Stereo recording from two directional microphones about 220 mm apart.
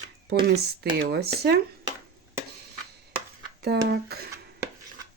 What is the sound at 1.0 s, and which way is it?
Speech, 45° right (ahead or behind).